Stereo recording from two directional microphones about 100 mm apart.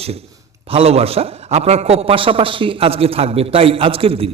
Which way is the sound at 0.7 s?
90° right.